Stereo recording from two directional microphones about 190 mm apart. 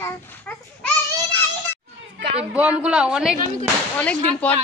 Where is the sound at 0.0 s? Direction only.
10° left (ahead or behind).